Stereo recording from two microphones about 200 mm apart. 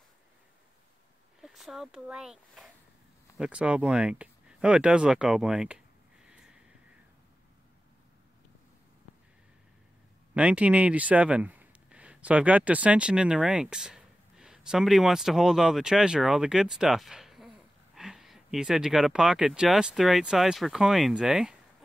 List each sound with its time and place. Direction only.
1.4 s speech: centre (ahead or behind)
6.2 s a sound: 5° right (ahead or behind)
10.3 s speech: 5° right (ahead or behind)